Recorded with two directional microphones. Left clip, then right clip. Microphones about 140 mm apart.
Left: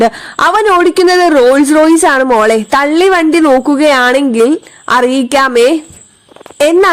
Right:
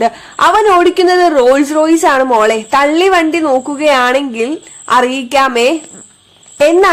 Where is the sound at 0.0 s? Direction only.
45° left (ahead or behind).